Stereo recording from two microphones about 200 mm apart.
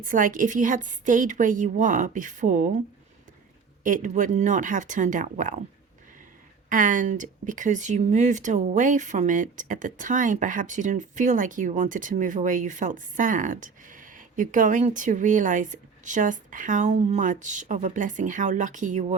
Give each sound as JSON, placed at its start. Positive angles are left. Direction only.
{"t": 0.0, "sound": "speech", "side_deg": -40}
{"t": 3.8, "sound": "speech", "side_deg": -40}
{"t": 6.7, "sound": "speech", "side_deg": -40}